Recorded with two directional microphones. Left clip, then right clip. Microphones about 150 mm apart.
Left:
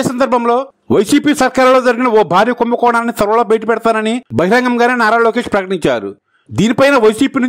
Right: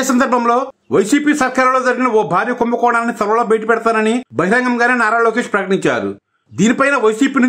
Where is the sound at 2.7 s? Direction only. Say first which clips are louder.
Left 2 dB; 75° left (ahead or behind).